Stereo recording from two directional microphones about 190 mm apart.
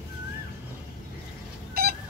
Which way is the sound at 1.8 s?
55° right (ahead or behind).